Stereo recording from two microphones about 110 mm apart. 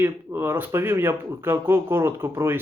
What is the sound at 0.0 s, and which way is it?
Speech, 20° right (ahead or behind).